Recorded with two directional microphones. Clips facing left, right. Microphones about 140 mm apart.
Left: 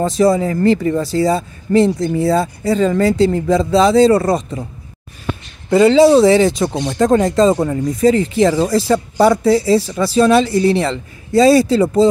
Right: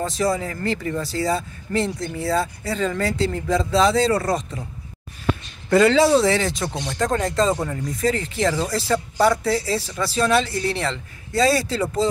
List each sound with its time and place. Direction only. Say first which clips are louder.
0.0 s speech: left 9 dB; 25° left (ahead or behind)
5.7 s speech: left 6 dB; 20° left (ahead or behind)